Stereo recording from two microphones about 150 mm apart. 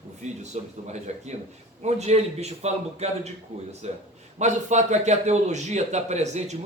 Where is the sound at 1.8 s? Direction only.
45° right (ahead or behind).